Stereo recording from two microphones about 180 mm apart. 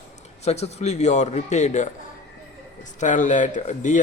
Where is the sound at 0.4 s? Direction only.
35° left (ahead or behind).